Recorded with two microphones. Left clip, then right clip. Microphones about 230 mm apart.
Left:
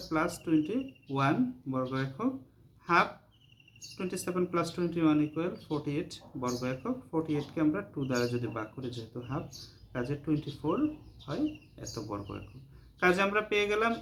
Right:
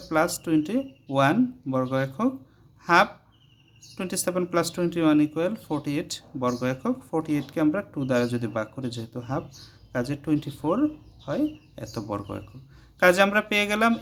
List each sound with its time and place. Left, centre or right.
0.1 s speech: right